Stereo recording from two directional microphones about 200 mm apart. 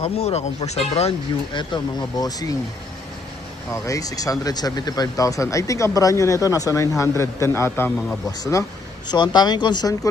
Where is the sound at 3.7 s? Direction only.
15° left (ahead or behind).